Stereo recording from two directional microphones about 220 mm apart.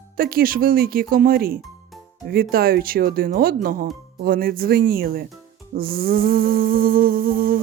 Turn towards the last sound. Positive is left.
turn(degrees=-40)  # may be behind; listen again after turning